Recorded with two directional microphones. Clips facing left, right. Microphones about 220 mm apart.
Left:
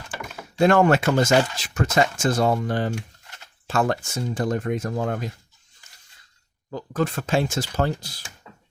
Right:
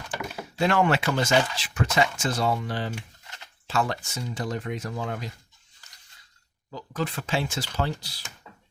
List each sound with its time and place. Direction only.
0.6 s speech: 50° left (ahead or behind)
6.7 s speech: 50° left (ahead or behind)